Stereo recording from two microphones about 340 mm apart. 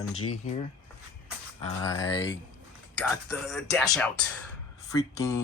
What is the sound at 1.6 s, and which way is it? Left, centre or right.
Speech, centre.